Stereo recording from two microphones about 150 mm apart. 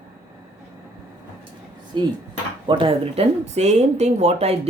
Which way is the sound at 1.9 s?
30° right (ahead or behind).